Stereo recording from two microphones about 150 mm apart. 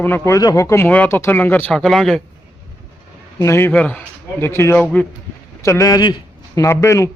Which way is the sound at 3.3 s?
15° left (ahead or behind).